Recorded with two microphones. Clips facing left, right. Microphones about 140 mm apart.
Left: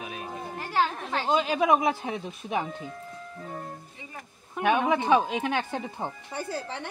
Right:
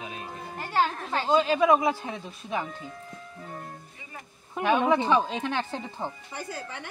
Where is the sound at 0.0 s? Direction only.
10° left (ahead or behind).